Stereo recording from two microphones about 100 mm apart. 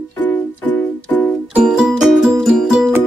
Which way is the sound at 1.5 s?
10° right (ahead or behind).